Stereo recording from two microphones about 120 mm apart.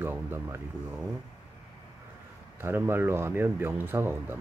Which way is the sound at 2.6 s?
20° right (ahead or behind).